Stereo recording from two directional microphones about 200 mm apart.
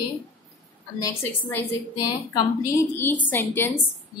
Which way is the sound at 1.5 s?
15° left (ahead or behind).